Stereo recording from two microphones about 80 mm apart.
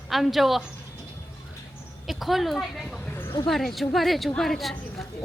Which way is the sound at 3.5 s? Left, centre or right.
Centre.